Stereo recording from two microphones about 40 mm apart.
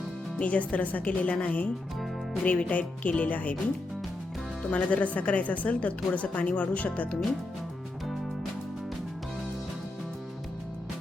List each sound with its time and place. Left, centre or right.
0.3 s a woman's voice: left
4.7 s a woman's voice: left